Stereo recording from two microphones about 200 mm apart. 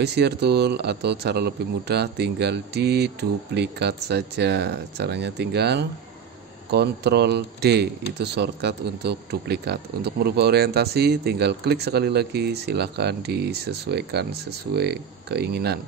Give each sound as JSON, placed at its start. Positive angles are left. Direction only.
{"t": 0.0, "sound": "a man's voice", "side_deg": -55}